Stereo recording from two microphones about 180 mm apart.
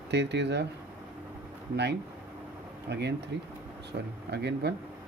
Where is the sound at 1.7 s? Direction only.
70° right (ahead or behind).